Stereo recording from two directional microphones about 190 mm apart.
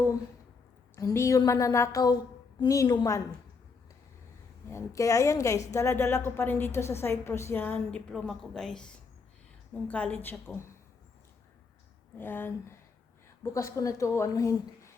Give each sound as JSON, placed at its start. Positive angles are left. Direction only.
{"t": 0.9, "sound": "a woman's voice", "side_deg": 15}
{"t": 4.7, "sound": "a woman's voice", "side_deg": 15}
{"t": 9.9, "sound": "a woman's voice", "side_deg": 5}
{"t": 12.1, "sound": "a woman's voice", "side_deg": 10}